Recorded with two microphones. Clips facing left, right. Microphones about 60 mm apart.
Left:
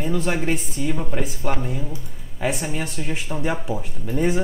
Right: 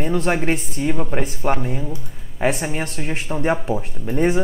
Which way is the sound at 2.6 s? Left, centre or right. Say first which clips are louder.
Right 2 dB; right.